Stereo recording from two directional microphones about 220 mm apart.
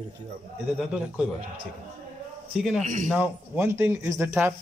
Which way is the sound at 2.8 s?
35° right (ahead or behind).